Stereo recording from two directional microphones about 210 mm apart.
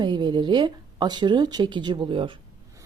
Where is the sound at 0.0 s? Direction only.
20° right (ahead or behind).